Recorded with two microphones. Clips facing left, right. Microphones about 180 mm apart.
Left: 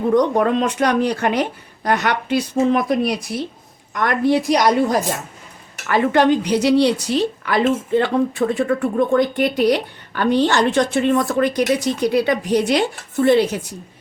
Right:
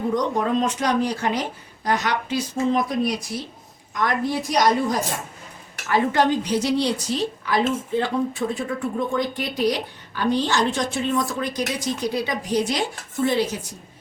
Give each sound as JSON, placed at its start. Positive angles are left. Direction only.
{"t": 0.1, "sound": "a woman's voice", "side_deg": 60}